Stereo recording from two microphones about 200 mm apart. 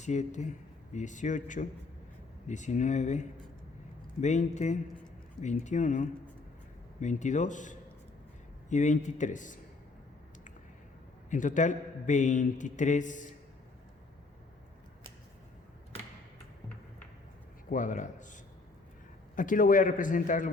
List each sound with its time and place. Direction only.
0.0 s a man's voice: 35° left (ahead or behind)
11.3 s a man's voice: 40° left (ahead or behind)
17.7 s a man's voice: 40° left (ahead or behind)
19.4 s a man's voice: 40° left (ahead or behind)